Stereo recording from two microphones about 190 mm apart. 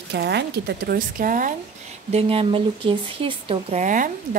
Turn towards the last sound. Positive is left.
turn(degrees=-45)  # may be behind; listen again after turning